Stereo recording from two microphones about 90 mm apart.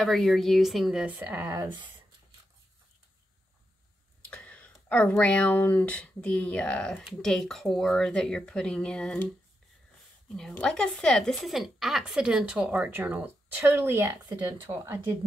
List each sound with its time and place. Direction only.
0.0 s a woman's voice: centre (ahead or behind)
1.0 s a woman's voice: 15° right (ahead or behind)
4.2 s speech: 15° left (ahead or behind)
10.5 s a woman's voice: 10° left (ahead or behind); by 15.1 s 30° right (ahead or behind)